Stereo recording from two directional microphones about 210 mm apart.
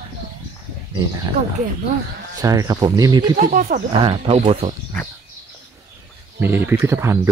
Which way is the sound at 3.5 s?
40° right (ahead or behind).